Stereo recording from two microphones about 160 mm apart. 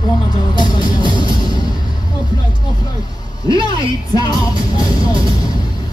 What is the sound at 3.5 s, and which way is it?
Music, 25° left (ahead or behind).